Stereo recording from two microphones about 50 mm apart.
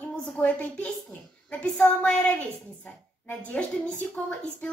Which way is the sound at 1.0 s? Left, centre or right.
Centre.